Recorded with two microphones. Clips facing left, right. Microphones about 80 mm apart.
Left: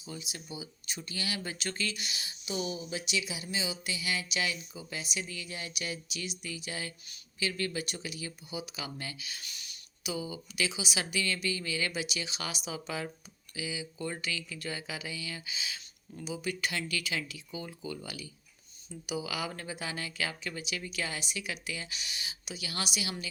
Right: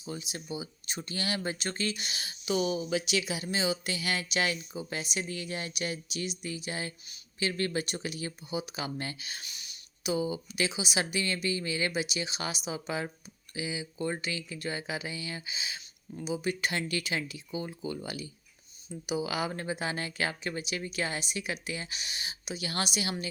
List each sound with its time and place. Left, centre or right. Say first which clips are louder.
0.0 s speech: right 4 dB; right
1.4 s speech: right 3 dB; right
2.4 s speech: right 7 dB; right
9.4 s a sound: right 1 dB; right
10.1 s speech: right 6 dB; right